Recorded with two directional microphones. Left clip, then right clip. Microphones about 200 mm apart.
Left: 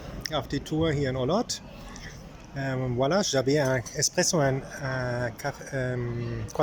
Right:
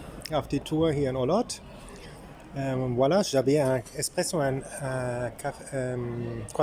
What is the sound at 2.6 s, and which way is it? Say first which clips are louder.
Speech: right 2 dB; 10° right (ahead or behind).